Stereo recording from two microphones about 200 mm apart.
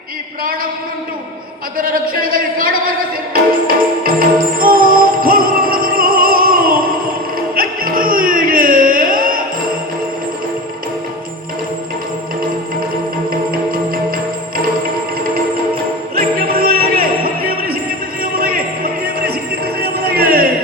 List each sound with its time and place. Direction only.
1.8 s speech: 45° right (ahead or behind)
3.3 s music: 45° right (ahead or behind)
13.3 s music: 45° right (ahead or behind)
16.1 s music: 50° right (ahead or behind)